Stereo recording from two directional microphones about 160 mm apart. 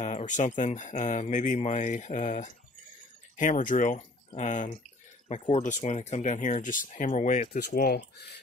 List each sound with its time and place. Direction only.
0.3 s speech: 50° left (ahead or behind)